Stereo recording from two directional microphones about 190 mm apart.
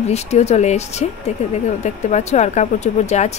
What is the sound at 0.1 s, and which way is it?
Speech, 35° left (ahead or behind).